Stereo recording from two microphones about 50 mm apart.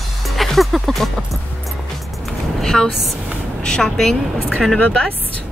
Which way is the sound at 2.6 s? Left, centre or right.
Centre.